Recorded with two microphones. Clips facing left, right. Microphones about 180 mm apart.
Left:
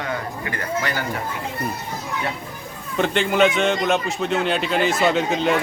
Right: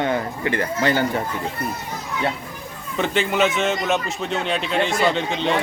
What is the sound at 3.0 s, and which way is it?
Speech, centre (ahead or behind).